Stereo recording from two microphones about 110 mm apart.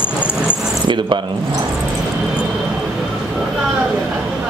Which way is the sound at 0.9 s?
45° right (ahead or behind).